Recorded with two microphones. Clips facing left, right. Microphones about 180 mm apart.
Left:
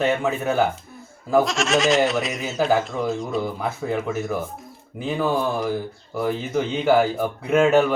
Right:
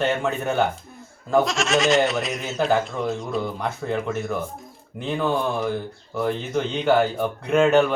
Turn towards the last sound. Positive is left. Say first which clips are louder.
# even
turn(degrees=5)  # may be behind; listen again after turning